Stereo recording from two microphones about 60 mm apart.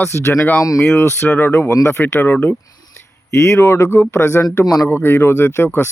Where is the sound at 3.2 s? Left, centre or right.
Left.